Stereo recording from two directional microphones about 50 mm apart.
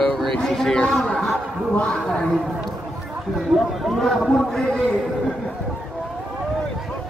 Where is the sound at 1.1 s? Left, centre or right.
Centre.